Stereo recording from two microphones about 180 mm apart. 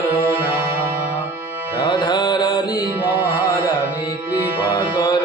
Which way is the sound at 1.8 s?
25° left (ahead or behind).